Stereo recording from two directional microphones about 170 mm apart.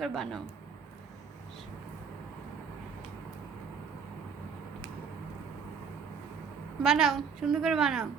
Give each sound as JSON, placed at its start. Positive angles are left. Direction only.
{"t": 0.0, "sound": "a woman's voice", "side_deg": 0}
{"t": 6.8, "sound": "a woman's voice", "side_deg": -5}